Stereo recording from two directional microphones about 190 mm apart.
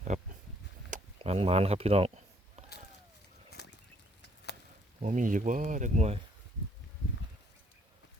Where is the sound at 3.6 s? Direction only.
60° left (ahead or behind).